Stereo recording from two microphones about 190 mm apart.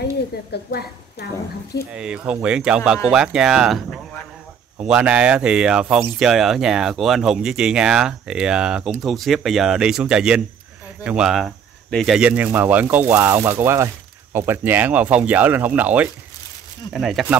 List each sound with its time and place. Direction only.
0.5 s a woman's voice: 60° left (ahead or behind)
1.9 s speech: 5° right (ahead or behind)